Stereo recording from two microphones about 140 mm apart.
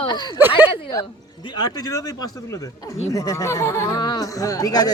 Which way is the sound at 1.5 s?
30° left (ahead or behind).